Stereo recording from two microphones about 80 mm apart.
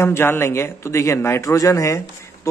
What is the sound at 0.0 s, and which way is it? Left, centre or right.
A man's voice, left.